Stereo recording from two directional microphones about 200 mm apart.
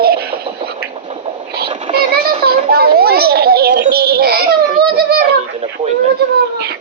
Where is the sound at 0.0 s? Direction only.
50° right (ahead or behind).